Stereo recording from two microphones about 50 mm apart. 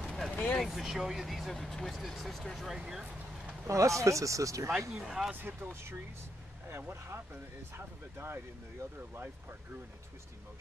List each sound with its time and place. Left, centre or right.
0.0 s vehicle: centre
0.3 s vehicle: left
0.7 s speech: centre
2.8 s speech: centre
3.6 s speech: right
4.9 s speech: centre
5.3 s speech: right
5.6 s speech: right
7.7 s speech: right